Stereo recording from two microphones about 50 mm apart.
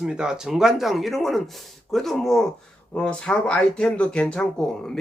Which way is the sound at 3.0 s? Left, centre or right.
Centre.